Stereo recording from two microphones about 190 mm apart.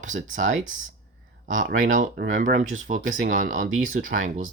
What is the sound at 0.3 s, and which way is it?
Speech, 40° right (ahead or behind).